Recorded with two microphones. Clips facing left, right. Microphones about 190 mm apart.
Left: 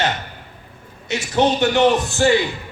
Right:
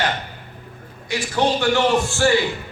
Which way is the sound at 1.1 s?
25° left (ahead or behind).